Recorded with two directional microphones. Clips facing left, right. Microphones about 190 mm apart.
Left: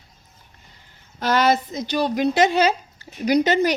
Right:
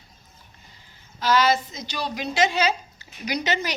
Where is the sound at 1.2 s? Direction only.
60° left (ahead or behind).